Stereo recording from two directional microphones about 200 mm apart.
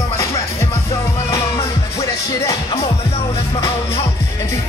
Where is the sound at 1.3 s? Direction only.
20° left (ahead or behind).